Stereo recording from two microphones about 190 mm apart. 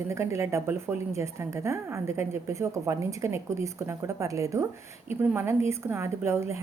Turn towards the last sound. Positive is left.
turn(degrees=-15)  # may be behind; listen again after turning